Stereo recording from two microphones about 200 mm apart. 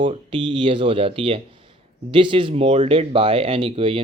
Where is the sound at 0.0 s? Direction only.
25° right (ahead or behind).